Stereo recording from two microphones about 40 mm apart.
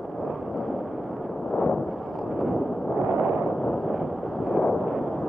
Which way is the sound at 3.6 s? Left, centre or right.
Centre.